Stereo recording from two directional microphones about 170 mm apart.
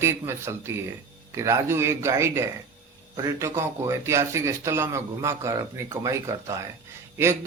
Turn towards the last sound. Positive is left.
turn(degrees=-15)  # may be behind; listen again after turning